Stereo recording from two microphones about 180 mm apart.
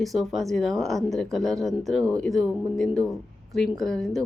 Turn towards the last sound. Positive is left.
turn(degrees=0)  # may be behind; listen again after turning